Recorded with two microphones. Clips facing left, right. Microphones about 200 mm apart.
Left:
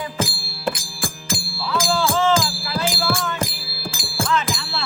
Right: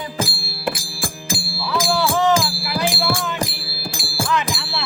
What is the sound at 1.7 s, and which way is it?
Music, 15° right (ahead or behind).